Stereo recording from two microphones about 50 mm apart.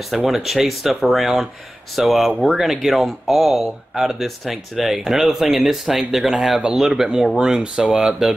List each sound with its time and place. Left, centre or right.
0.1 s speech: centre